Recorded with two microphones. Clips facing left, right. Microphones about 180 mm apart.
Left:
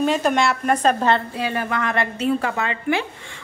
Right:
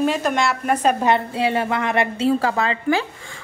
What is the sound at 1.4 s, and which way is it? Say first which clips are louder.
Speech: right 3 dB; 25° right (ahead or behind).